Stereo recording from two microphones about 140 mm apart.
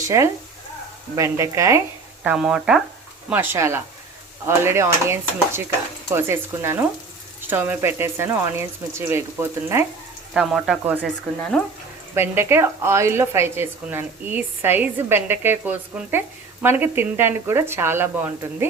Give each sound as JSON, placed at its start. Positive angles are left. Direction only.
{"t": 0.0, "sound": "a woman's voice", "side_deg": -20}
{"t": 2.2, "sound": "a woman's voice", "side_deg": -5}
{"t": 10.3, "sound": "speech", "side_deg": -5}
{"t": 12.1, "sound": "a woman's voice", "side_deg": -15}